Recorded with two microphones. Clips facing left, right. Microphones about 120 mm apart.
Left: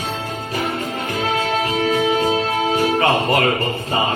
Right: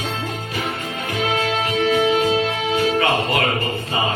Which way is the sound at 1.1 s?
40° left (ahead or behind).